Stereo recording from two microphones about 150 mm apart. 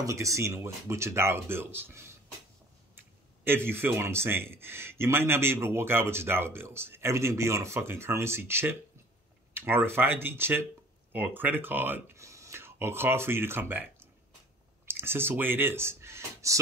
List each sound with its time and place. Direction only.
0.0 s a man's voice: 20° right (ahead or behind)
3.4 s a man's voice: 15° right (ahead or behind)
14.9 s speech: 15° right (ahead or behind)